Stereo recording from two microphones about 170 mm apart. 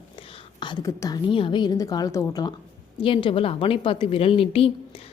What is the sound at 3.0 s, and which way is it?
Speech, 30° left (ahead or behind).